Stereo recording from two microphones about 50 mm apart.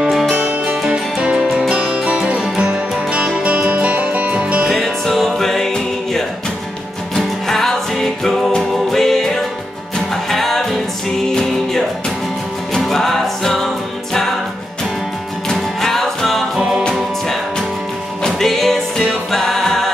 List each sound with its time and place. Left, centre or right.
0.0 s music: centre
0.3 s music: right
0.8 s music: centre
4.6 s music: centre
12.8 s music: centre
15.5 s music: centre
18.2 s music: centre